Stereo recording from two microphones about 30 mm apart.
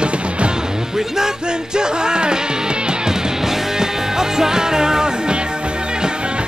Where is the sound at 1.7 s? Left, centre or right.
Right.